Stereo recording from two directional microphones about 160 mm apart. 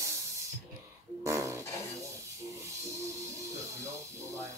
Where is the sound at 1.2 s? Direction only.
20° right (ahead or behind).